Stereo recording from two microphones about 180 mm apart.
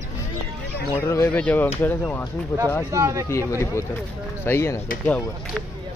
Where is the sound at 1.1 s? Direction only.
15° left (ahead or behind).